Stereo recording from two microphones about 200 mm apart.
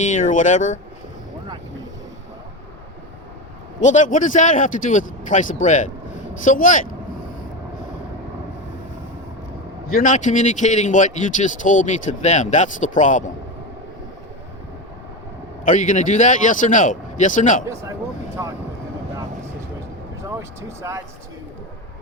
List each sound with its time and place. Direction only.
0.0 s speech: 40° left (ahead or behind)
3.8 s speech: 40° left (ahead or behind)
9.9 s speech: 40° left (ahead or behind)
15.6 s speech: 40° left (ahead or behind)
18.4 s speech: 15° right (ahead or behind)
20.2 s speech: 15° right (ahead or behind)